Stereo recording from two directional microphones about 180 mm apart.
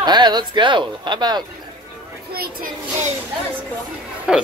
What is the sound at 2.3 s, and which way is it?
Speech, 55° right (ahead or behind).